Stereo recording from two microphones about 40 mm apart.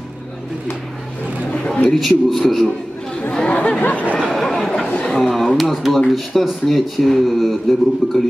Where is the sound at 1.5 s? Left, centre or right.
Left.